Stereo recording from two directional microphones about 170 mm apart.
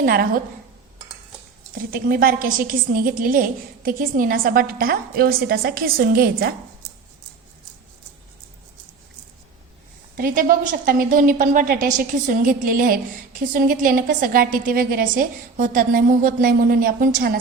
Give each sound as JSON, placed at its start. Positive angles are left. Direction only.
{"t": 0.0, "sound": "a woman's voice", "side_deg": -60}
{"t": 1.8, "sound": "a woman's voice", "side_deg": -55}
{"t": 10.2, "sound": "a woman's voice", "side_deg": -55}